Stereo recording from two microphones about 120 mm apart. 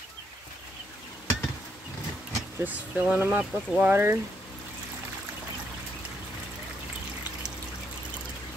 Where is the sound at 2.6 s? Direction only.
15° right (ahead or behind).